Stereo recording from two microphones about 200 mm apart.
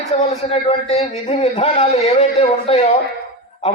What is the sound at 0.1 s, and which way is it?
A man's voice, 30° left (ahead or behind).